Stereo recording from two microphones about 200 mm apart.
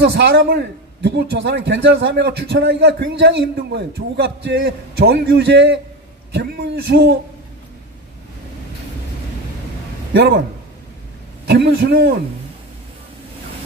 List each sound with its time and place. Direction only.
0.1 s a man's voice: 55° right (ahead or behind)
10.1 s a man's voice: 60° right (ahead or behind)
11.4 s a man's voice: 55° right (ahead or behind)